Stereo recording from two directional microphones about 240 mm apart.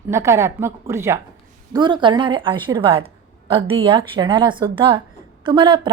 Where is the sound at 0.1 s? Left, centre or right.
Centre.